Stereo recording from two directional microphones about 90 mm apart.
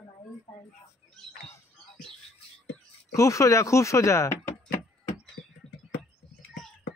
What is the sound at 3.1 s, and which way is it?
Speech, 35° left (ahead or behind).